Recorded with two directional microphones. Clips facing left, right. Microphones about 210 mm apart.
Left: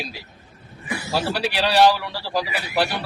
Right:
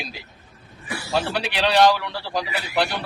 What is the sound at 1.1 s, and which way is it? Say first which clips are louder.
A man's voice: even; 5° left (ahead or behind).